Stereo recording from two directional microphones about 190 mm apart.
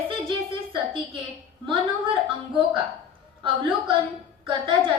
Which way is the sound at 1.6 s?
25° right (ahead or behind).